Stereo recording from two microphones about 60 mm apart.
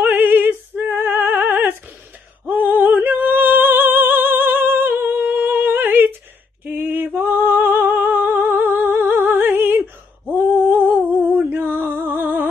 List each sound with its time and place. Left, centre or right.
0.0 s opera: right
2.4 s music: right
6.6 s a sound: right